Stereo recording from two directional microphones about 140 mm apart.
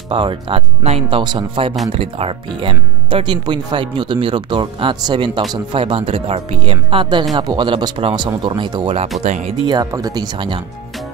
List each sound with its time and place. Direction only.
0.1 s speech: 40° right (ahead or behind)
9.2 s speech: 55° right (ahead or behind)
9.7 s speech: 30° right (ahead or behind)